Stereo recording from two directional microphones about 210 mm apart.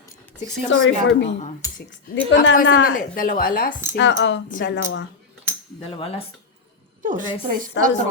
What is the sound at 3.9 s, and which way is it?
A woman's voice, 55° left (ahead or behind).